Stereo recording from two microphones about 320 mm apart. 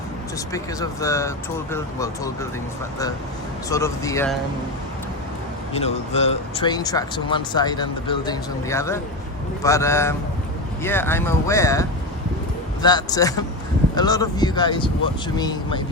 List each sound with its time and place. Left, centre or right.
0.5 s speech: centre
3.7 s speech: centre
5.8 s speech: centre